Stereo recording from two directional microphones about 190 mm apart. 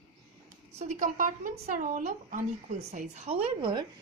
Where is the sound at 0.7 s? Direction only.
45° right (ahead or behind).